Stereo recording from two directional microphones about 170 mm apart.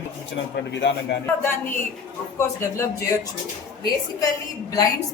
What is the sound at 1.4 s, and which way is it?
Speech, 15° left (ahead or behind).